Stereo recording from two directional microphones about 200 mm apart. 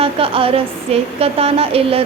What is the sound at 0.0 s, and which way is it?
A woman's voice, 30° right (ahead or behind).